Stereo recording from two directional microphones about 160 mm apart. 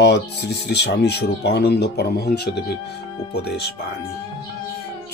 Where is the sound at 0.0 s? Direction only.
90° left.